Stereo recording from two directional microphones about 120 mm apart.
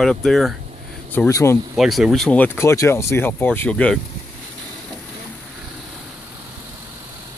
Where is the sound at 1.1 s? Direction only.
20° left (ahead or behind).